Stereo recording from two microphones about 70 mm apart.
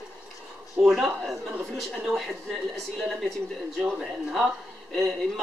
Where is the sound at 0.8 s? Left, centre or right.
Centre.